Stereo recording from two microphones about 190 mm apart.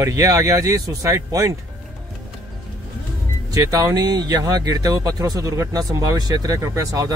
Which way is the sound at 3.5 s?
15° right (ahead or behind).